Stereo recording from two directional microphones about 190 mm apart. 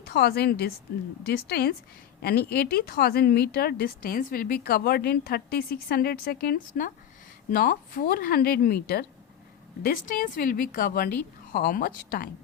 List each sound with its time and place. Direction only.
0.1 s a woman's voice: 55° left (ahead or behind)